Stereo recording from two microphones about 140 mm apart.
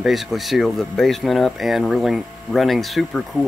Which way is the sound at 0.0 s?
Centre (ahead or behind).